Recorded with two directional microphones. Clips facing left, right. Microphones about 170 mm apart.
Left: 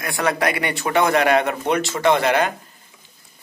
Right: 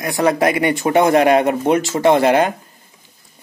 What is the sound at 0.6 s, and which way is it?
Speech, 40° right (ahead or behind).